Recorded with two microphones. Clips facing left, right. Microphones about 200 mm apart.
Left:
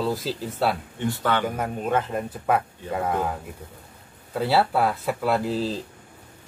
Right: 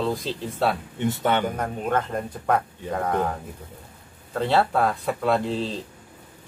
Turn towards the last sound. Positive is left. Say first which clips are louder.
# even
turn(degrees=5)  # may be behind; listen again after turning